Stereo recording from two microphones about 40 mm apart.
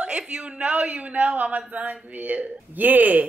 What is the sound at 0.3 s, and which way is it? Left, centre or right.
Speech, right.